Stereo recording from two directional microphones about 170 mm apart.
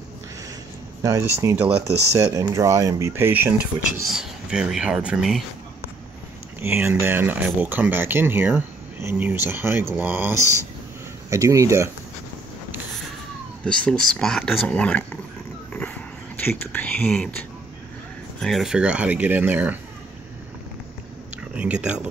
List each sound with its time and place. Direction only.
1.0 s speech: 20° right (ahead or behind)
6.6 s speech: 10° right (ahead or behind)
13.7 s speech: 5° left (ahead or behind)
15.7 s a sound: 5° left (ahead or behind)
16.4 s speech: 10° left (ahead or behind); by 19.8 s 10° right (ahead or behind)
21.5 s speech: 5° right (ahead or behind)